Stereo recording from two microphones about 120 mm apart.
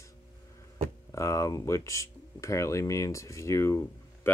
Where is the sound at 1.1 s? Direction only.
25° left (ahead or behind).